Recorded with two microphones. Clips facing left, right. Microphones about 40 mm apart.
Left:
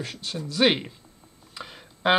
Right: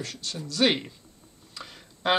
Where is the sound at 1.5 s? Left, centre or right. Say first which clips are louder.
Left 3 dB; centre.